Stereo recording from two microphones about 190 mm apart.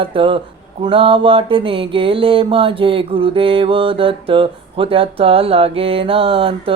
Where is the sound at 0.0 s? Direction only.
25° right (ahead or behind).